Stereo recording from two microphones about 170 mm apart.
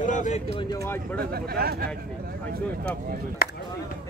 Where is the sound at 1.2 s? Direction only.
65° right (ahead or behind).